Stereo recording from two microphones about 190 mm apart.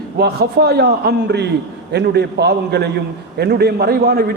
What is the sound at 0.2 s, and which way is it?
A man's voice, 55° right (ahead or behind).